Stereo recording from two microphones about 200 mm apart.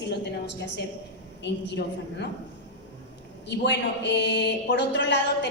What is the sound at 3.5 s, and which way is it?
Speech, 60° left (ahead or behind).